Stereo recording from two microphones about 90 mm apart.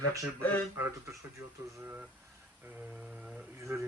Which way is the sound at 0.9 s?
30° right (ahead or behind).